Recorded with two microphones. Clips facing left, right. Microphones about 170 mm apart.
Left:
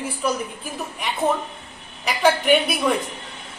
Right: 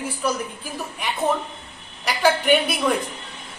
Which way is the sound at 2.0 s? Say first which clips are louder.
Left 1 dB; centre (ahead or behind).